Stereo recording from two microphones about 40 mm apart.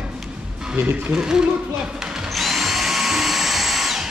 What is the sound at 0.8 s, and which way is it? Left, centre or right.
Speech, right.